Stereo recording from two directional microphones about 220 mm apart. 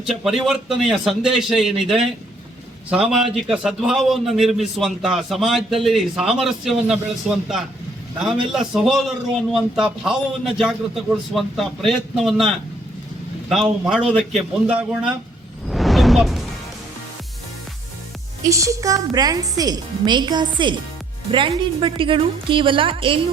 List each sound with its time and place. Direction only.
0.0 s a man's voice: centre (ahead or behind)
13.5 s a man's voice: centre (ahead or behind)
15.6 s music: centre (ahead or behind)
18.4 s a woman's voice: 15° right (ahead or behind)